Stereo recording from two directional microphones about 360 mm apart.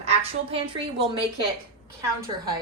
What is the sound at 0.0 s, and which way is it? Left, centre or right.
Speech, centre.